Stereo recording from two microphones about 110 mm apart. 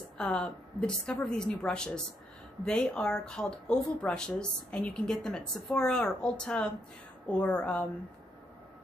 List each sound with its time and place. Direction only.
0.2 s speech: 10° left (ahead or behind)